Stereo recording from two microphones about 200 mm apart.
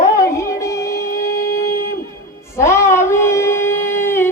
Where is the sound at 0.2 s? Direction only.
15° left (ahead or behind).